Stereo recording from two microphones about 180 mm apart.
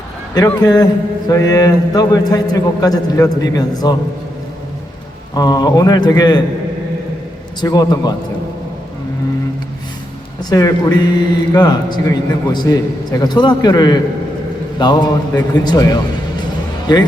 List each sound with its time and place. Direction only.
0.3 s a man's voice: 20° left (ahead or behind)
5.3 s a man's voice: 20° left (ahead or behind)
7.6 s a man's voice: 20° left (ahead or behind)
10.5 s a man's voice: 20° left (ahead or behind)